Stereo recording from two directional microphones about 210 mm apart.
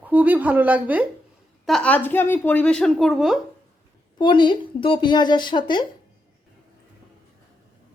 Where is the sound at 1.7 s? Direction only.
5° left (ahead or behind).